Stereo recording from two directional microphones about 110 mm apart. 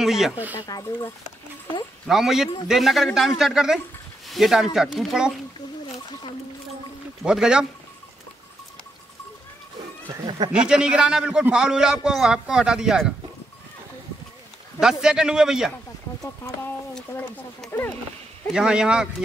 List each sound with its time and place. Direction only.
0.0 s a man's voice: 5° right (ahead or behind)
0.6 s speech: 35° left (ahead or behind)
2.0 s a man's voice: 5° right (ahead or behind)
7.2 s a man's voice: 5° right (ahead or behind)
10.5 s a man's voice: 10° right (ahead or behind)
14.8 s a man's voice: 5° right (ahead or behind)
16.2 s speech: 30° left (ahead or behind)
18.5 s a man's voice: 5° right (ahead or behind)